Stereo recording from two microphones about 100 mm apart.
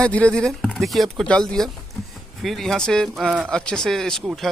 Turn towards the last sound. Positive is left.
turn(degrees=5)  # may be behind; listen again after turning